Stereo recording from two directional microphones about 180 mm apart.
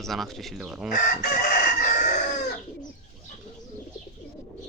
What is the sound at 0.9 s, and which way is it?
Chicken, 55° left (ahead or behind).